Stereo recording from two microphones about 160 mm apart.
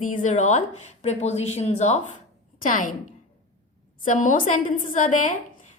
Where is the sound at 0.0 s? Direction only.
55° left (ahead or behind).